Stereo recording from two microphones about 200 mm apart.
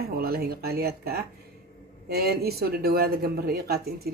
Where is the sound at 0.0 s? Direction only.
50° right (ahead or behind).